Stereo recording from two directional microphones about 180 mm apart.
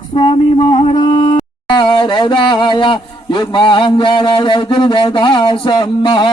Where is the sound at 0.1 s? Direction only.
30° left (ahead or behind).